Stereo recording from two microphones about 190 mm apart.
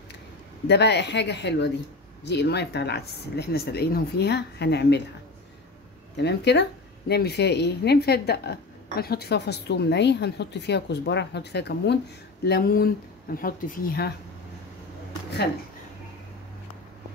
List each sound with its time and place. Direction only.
0.7 s speech: 65° left (ahead or behind)
6.1 s speech: 65° left (ahead or behind)